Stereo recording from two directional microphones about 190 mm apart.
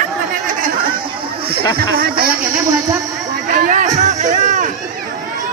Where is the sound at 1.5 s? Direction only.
50° right (ahead or behind).